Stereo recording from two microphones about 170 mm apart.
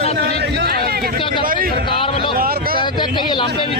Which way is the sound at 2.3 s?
60° right (ahead or behind).